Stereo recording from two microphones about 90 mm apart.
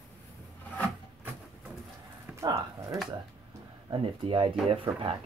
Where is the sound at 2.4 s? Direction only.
45° right (ahead or behind).